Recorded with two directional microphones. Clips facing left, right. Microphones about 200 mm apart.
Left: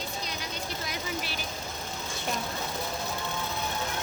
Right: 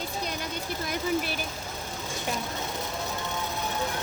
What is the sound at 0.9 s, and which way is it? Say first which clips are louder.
Vehicle: right 11 dB; 50° right (ahead or behind).